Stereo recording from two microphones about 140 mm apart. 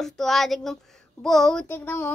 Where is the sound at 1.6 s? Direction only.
15° left (ahead or behind).